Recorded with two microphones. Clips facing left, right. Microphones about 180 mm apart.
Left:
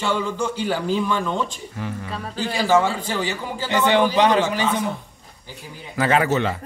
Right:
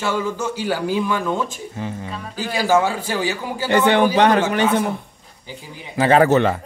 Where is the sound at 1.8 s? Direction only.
25° right (ahead or behind).